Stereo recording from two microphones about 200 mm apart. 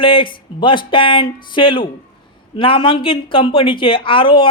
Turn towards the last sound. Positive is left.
turn(degrees=25)  # may be behind; listen again after turning